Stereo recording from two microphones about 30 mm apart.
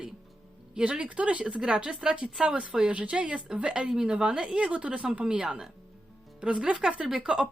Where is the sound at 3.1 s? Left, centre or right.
Right.